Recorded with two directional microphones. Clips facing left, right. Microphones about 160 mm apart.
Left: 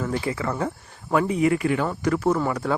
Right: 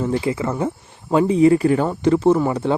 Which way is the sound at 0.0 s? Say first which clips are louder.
Right 5 dB; 25° right (ahead or behind).